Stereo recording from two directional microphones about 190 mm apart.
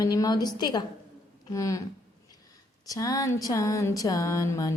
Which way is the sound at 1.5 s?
15° left (ahead or behind).